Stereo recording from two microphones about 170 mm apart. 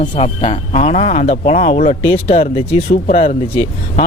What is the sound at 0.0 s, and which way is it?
Speech, 35° left (ahead or behind).